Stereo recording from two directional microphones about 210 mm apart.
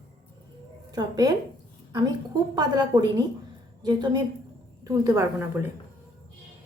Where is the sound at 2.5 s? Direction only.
20° right (ahead or behind).